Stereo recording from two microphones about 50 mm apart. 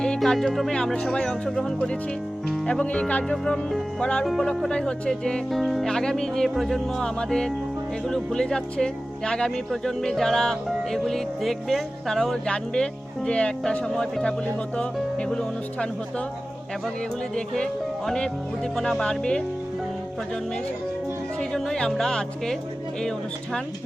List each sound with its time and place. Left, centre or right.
0.2 s speech: centre
0.9 s speech: left
1.3 s speech: centre
5.5 s speech: centre
17.6 s speech: centre
21.5 s speech: centre